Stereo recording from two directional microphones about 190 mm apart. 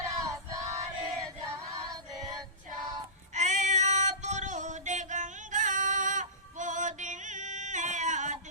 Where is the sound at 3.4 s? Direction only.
40° right (ahead or behind).